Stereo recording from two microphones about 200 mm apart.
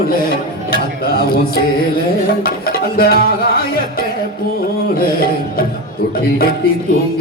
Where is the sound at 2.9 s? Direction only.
50° left (ahead or behind).